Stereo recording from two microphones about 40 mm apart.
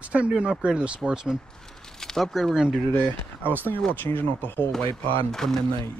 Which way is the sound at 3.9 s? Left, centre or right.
Left.